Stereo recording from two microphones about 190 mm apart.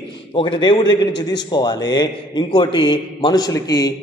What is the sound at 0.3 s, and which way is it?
Speech, 25° left (ahead or behind).